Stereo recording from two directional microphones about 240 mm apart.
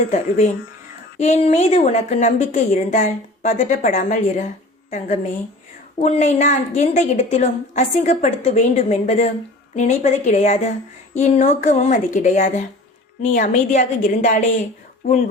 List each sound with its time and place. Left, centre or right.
0.1 s a woman's voice: left